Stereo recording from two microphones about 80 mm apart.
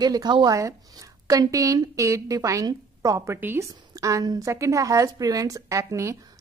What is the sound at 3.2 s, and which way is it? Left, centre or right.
Speech, right.